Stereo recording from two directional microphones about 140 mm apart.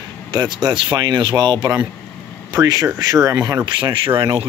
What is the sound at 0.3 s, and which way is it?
Speech, 30° right (ahead or behind).